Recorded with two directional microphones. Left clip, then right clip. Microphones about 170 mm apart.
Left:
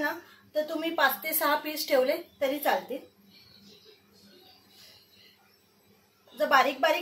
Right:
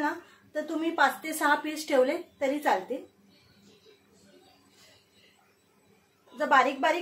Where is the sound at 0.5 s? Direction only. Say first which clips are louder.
Left 1 dB; 30° right (ahead or behind).